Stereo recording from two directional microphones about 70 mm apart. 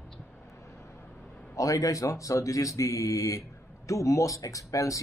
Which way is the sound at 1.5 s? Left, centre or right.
Left.